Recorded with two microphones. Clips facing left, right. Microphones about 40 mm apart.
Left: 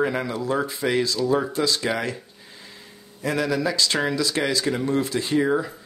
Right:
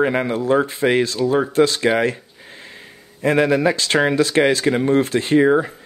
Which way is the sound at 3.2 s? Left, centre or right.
Right.